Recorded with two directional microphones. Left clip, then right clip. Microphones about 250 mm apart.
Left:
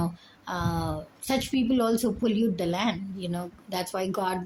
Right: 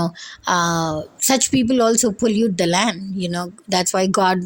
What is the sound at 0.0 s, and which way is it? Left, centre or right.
A woman's voice, right.